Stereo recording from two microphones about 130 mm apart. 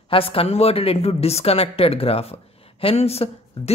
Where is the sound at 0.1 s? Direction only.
45° left (ahead or behind).